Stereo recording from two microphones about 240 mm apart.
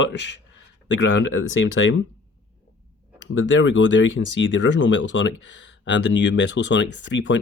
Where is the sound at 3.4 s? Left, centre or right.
Left.